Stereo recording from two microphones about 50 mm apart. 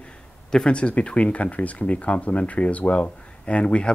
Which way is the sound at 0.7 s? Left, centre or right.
Left.